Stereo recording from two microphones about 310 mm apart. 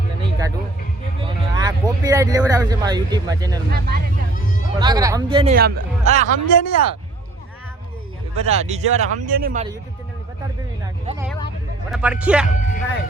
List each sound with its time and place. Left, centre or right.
0.2 s music: centre
1.2 s speech: centre
3.7 s speech: right
4.8 s speech: centre
6.5 s speech: left
8.4 s speech: right
11.0 s speech: centre
11.9 s speech: centre
12.5 s speech: left